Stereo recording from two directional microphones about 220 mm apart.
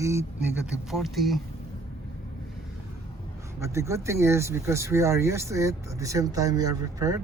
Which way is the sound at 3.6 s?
15° right (ahead or behind).